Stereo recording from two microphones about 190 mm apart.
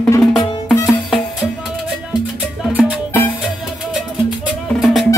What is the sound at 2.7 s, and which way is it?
Music, 5° right (ahead or behind).